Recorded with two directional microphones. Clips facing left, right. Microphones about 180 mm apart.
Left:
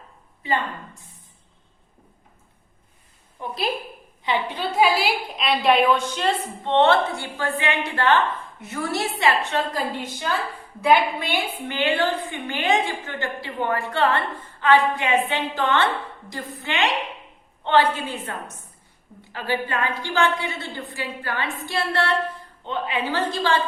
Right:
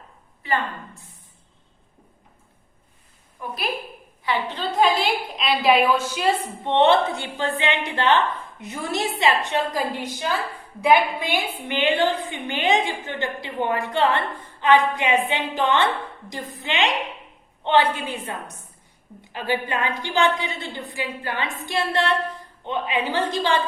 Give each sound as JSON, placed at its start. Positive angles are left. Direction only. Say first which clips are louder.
{"t": 4.2, "sound": "a woman's voice", "louder": "left 1 dB", "side_deg": 15}